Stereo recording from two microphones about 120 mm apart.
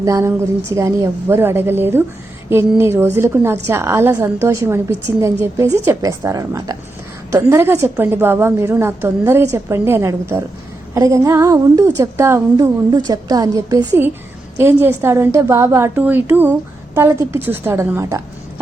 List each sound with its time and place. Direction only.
0.0 s a woman's voice: 25° right (ahead or behind)